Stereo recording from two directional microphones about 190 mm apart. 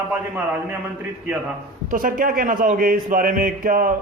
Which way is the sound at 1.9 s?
50° right (ahead or behind).